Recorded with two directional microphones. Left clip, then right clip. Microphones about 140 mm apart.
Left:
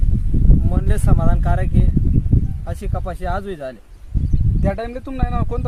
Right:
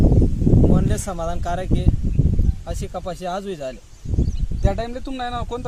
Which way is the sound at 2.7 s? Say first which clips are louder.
Right 2 dB; 10° right (ahead or behind).